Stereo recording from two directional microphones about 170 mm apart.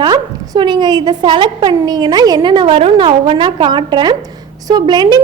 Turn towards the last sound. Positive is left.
turn(degrees=-25)  # may be behind; listen again after turning